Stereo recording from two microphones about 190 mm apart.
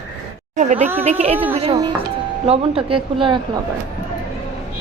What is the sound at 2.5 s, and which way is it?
Speech, 30° right (ahead or behind).